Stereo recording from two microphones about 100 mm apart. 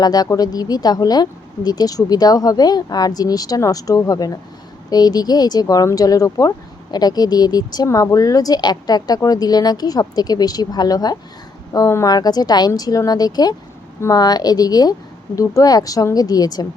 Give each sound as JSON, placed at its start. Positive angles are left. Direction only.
{"t": 0.0, "sound": "a woman's voice", "side_deg": 40}